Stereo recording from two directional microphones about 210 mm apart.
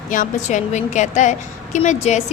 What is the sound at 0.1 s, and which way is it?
A woman's voice, 35° left (ahead or behind).